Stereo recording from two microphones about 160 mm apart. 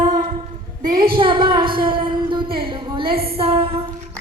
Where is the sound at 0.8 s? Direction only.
55° right (ahead or behind).